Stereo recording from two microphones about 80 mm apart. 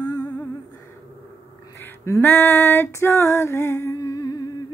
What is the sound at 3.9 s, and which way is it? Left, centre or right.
Humming, left.